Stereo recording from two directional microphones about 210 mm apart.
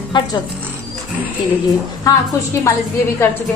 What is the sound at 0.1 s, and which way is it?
Speech, 20° left (ahead or behind).